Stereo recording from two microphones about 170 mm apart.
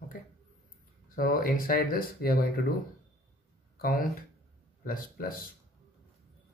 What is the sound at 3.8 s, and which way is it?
Speech, 55° left (ahead or behind).